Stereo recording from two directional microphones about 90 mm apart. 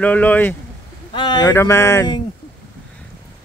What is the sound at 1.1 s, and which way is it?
Speech, 60° left (ahead or behind).